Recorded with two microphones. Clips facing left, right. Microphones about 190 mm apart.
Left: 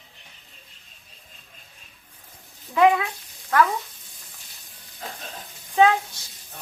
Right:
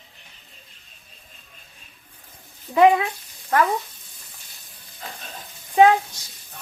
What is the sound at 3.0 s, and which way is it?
Speech, 15° right (ahead or behind).